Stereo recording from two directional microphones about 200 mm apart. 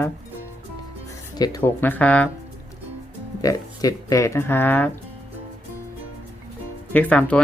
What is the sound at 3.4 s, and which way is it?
Speech, 15° left (ahead or behind).